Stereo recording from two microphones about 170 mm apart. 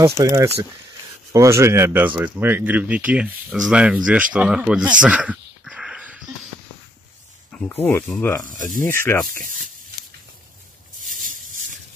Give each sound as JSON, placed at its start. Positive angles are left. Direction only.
{"t": 0.2, "sound": "speech", "side_deg": -20}
{"t": 7.5, "sound": "speech", "side_deg": 10}
{"t": 9.3, "sound": "speech", "side_deg": -50}
{"t": 11.0, "sound": "a sound", "side_deg": -50}